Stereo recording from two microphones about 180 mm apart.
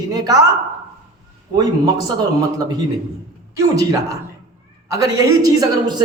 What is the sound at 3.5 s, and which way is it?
A man's voice, 15° right (ahead or behind).